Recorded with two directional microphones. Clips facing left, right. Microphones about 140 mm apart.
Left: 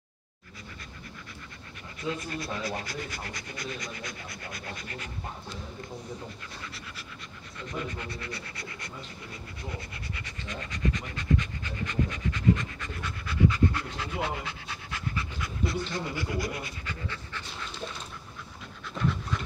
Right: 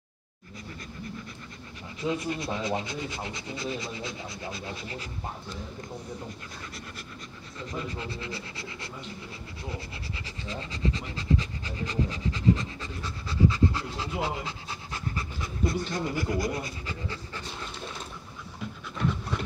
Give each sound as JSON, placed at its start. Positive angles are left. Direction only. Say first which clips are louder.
{"t": 2.0, "sound": "speech", "louder": "right 4 dB", "side_deg": -20}
{"t": 7.6, "sound": "speech", "louder": "right 1 dB", "side_deg": -30}
{"t": 10.1, "sound": "speech", "louder": "right 3 dB", "side_deg": -30}
{"t": 14.2, "sound": "pant", "louder": "right 1 dB", "side_deg": -30}